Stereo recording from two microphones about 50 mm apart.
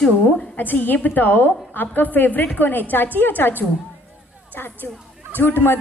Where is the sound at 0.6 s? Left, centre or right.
Left.